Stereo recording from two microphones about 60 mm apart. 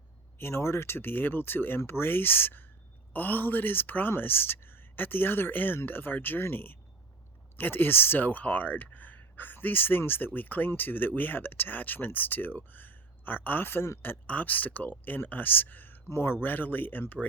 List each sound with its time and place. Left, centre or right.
0.3 s speech: left
14.3 s speech: left
16.0 s speech: left